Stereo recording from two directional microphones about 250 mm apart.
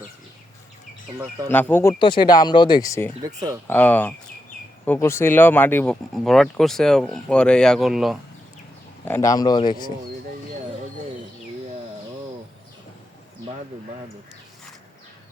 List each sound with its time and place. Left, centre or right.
1.5 s speech: centre
3.2 s speech: centre
3.7 s speech: centre
9.0 s speech: centre